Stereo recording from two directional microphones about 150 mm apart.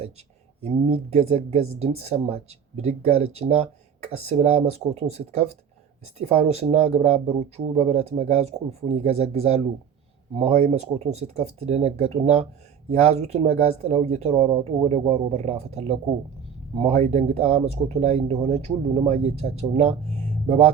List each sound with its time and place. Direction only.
0.6 s speech: 45° right (ahead or behind)